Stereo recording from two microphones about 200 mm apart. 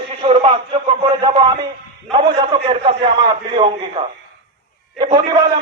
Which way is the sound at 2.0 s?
25° right (ahead or behind).